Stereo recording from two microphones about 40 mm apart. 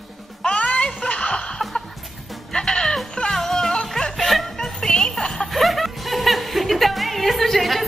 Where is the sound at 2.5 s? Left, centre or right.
Centre.